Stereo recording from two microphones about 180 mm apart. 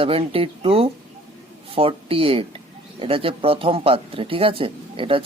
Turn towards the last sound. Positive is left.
turn(degrees=-30)  # may be behind; listen again after turning